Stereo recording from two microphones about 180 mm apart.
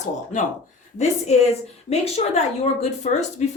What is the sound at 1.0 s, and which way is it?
A woman's voice, 40° left (ahead or behind).